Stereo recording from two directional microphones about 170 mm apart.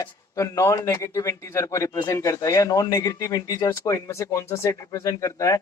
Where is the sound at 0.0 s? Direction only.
20° left (ahead or behind).